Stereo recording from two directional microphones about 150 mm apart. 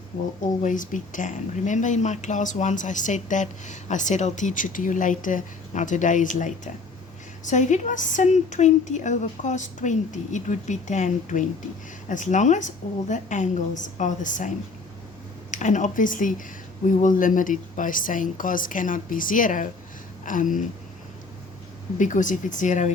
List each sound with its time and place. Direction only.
0.6 s speech: 60° left (ahead or behind)
21.9 s speech: 60° left (ahead or behind)